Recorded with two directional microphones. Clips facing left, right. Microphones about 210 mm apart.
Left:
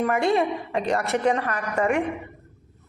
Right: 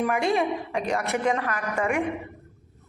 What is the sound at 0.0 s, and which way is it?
A woman's voice, centre (ahead or behind).